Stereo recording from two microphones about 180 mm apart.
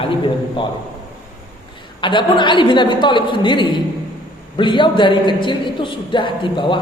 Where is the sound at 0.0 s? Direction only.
30° left (ahead or behind).